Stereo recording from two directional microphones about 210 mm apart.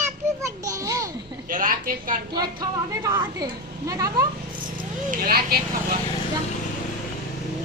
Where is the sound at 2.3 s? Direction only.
20° right (ahead or behind).